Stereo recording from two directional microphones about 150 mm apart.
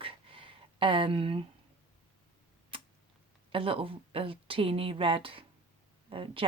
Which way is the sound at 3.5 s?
35° right (ahead or behind).